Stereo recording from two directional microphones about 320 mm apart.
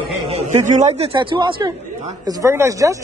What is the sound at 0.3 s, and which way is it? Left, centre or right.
A man's voice, right.